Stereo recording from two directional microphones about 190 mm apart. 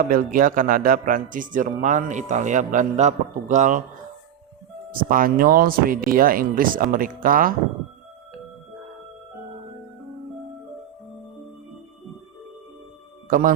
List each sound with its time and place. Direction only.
0.0 s speech: 45° right (ahead or behind)
4.9 s speech: 45° right (ahead or behind)
13.2 s speech: 45° right (ahead or behind)